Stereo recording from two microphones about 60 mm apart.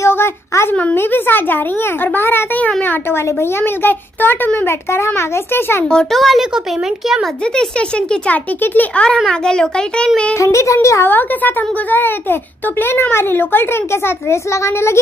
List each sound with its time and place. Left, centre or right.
0.0 s a sound: left
0.9 s a child's voice: left
3.3 s a child's voice: left
6.1 s a child's voice: centre
7.5 s a child's voice: centre
10.3 s a woman's voice: left
11.1 s a child's voice: left
14.5 s a child's voice: left